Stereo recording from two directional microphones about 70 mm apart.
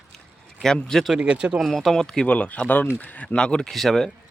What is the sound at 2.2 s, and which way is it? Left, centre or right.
Speech, centre.